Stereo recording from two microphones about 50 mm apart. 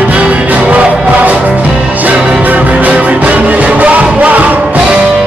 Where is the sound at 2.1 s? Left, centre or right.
Centre.